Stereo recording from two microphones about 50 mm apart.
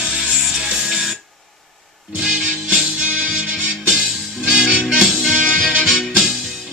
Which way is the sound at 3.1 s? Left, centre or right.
Right.